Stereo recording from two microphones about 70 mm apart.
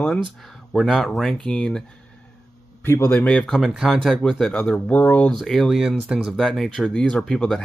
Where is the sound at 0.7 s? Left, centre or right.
Centre.